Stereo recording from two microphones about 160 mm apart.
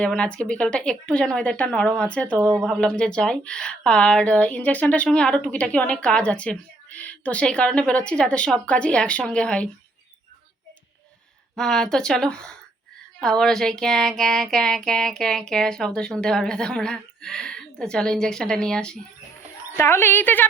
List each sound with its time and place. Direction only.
0.0 s speech: 5° left (ahead or behind)
2.4 s speech: 20° right (ahead or behind)
2.6 s speech: 5° left (ahead or behind)
11.5 s speech: 5° left (ahead or behind)
19.7 s speech: 15° left (ahead or behind)